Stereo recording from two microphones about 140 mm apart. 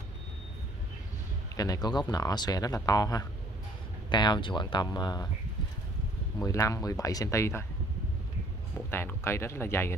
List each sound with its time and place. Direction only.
1.6 s speech: 30° left (ahead or behind)
6.4 s speech: 25° left (ahead or behind)
8.9 s speech: 15° left (ahead or behind)